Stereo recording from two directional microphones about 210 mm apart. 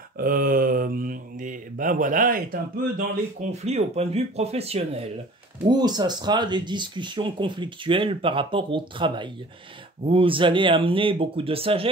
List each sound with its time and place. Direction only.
0.2 s mantra: 45° right (ahead or behind)
3.6 s speech: 30° right (ahead or behind)